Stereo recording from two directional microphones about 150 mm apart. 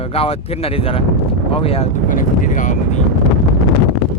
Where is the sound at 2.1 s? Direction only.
60° left (ahead or behind).